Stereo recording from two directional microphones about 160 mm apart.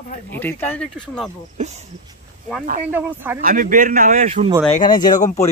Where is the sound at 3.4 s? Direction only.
55° right (ahead or behind).